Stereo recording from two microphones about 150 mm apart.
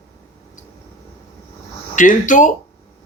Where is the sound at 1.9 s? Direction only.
60° left (ahead or behind).